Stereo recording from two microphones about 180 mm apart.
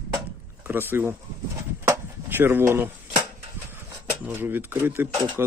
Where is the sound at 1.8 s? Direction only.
15° right (ahead or behind).